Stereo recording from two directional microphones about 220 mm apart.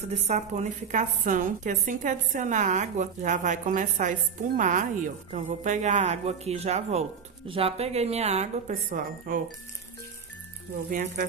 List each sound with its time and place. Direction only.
0.3 s a woman's voice: 30° right (ahead or behind)
10.9 s a woman's voice: 35° right (ahead or behind)